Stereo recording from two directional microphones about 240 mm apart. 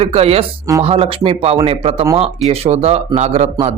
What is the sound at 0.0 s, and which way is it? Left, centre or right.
Speech, right.